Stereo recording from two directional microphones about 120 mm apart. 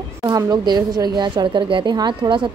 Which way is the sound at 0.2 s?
30° right (ahead or behind).